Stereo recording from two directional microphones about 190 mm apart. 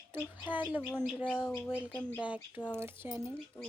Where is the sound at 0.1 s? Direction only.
10° right (ahead or behind).